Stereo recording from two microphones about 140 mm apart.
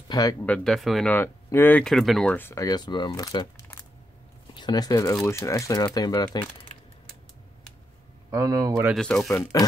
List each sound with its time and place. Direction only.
0.1 s speech: 25° left (ahead or behind)
0.4 s speech: 10° left (ahead or behind)
0.7 s speech: centre (ahead or behind)
1.0 s speech: 15° left (ahead or behind)
2.3 s speech: 15° left (ahead or behind)
2.6 s speech: 30° left (ahead or behind)
4.6 s speech: 30° left (ahead or behind)
8.3 s speech: 25° right (ahead or behind)
8.9 s speech: 5° left (ahead or behind)